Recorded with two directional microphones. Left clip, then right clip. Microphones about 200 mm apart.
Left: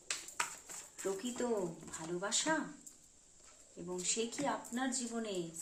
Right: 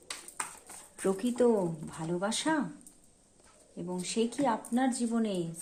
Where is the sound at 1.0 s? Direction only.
50° right (ahead or behind).